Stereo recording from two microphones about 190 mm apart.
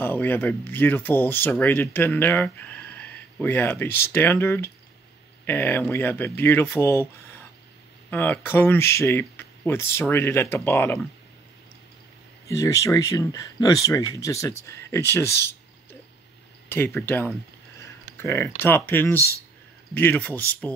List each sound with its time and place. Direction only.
0.0 s speech: 10° left (ahead or behind)
12.4 s speech: 15° left (ahead or behind)
16.6 s speech: 10° left (ahead or behind)